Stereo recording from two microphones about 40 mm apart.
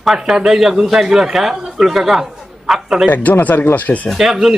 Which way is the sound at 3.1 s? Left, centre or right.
Left.